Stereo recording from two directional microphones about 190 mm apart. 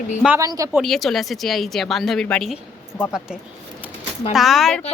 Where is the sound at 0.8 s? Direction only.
Centre (ahead or behind).